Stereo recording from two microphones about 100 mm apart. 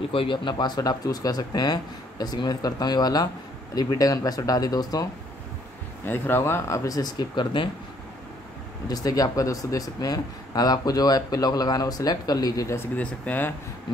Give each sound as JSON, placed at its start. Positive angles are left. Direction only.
{"t": 0.1, "sound": "speech", "side_deg": 60}
{"t": 6.0, "sound": "speech", "side_deg": 20}
{"t": 8.8, "sound": "speech", "side_deg": 40}
{"t": 12.9, "sound": "speech", "side_deg": 15}